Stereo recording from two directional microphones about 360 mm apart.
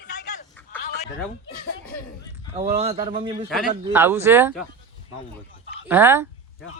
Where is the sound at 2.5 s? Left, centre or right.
Centre.